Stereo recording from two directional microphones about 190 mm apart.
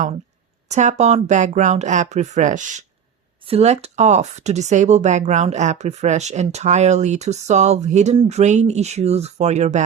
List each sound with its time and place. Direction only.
0.7 s speech: 40° right (ahead or behind)